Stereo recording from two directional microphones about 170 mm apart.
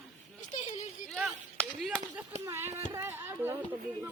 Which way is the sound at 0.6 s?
40° left (ahead or behind).